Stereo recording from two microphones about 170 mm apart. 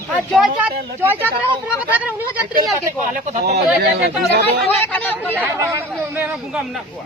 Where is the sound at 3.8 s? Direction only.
65° right (ahead or behind).